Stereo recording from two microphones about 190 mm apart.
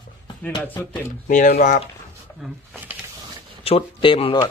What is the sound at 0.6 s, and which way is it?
Speech, 10° left (ahead or behind).